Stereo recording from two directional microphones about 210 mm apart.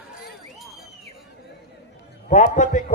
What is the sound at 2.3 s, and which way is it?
Speech, 35° left (ahead or behind).